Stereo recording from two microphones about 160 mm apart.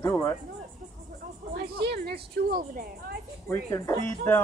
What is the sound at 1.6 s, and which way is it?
A woman's voice, 90° right.